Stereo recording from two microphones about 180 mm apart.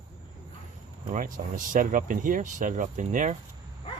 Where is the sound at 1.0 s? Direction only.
45° right (ahead or behind).